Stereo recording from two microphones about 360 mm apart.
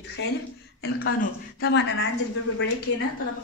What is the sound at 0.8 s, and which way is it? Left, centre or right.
A woman's voice, left.